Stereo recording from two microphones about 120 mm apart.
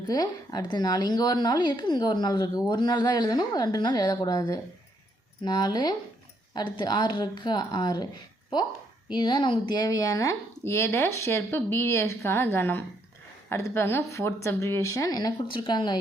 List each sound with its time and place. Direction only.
0.1 s speech: 35° left (ahead or behind)
9.0 s speech: 40° left (ahead or behind)
15.4 s speech: 45° left (ahead or behind)